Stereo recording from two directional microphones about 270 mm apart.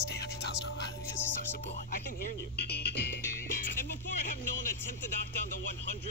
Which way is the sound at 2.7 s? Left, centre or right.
Left.